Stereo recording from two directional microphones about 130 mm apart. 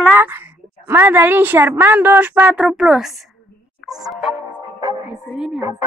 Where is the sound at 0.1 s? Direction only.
15° right (ahead or behind).